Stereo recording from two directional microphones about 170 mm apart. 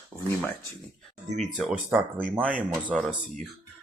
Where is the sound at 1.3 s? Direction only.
45° right (ahead or behind).